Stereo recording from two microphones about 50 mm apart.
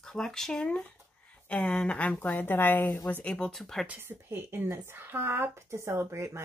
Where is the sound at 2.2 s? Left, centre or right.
Left.